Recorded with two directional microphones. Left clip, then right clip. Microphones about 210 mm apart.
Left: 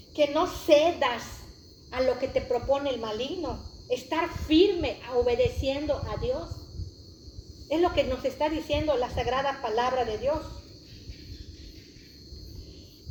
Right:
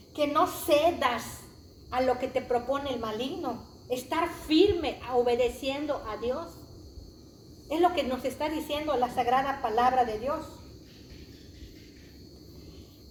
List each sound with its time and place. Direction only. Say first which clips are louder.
0.2 s a woman's voice: left 1 dB; 20° right (ahead or behind)
1.9 s a woman's voice: left 1 dB; 15° right (ahead or behind)
7.7 s a woman's voice: left 1 dB; 15° right (ahead or behind)